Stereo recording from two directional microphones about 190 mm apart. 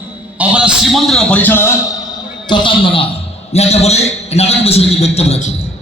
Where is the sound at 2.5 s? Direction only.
25° left (ahead or behind).